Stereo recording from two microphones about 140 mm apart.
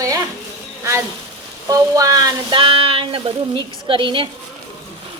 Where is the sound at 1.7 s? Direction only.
25° right (ahead or behind).